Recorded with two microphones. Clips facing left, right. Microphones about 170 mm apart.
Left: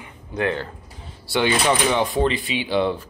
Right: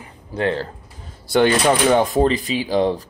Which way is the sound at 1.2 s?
45° right (ahead or behind).